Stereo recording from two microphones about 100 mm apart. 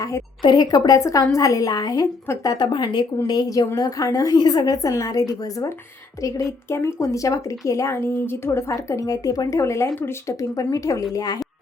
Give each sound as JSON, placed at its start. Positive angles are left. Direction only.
{"t": 0.4, "sound": "speech", "side_deg": 45}
{"t": 2.2, "sound": "speech", "side_deg": 25}
{"t": 2.5, "sound": "a woman's voice", "side_deg": 50}